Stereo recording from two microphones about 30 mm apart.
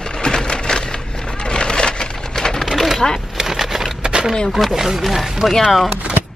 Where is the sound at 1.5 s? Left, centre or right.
Left.